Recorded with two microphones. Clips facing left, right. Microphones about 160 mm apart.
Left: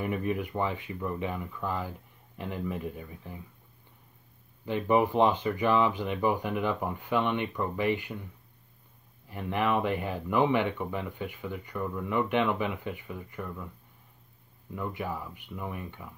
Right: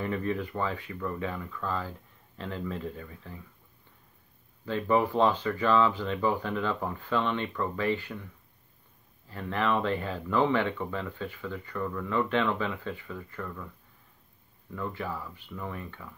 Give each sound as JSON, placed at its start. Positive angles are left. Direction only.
{"t": 0.0, "sound": "speech", "side_deg": 15}
{"t": 4.6, "sound": "speech", "side_deg": 15}
{"t": 9.3, "sound": "speech", "side_deg": 15}
{"t": 14.7, "sound": "speech", "side_deg": 15}